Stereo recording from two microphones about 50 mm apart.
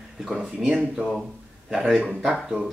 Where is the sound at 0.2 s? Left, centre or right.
Centre.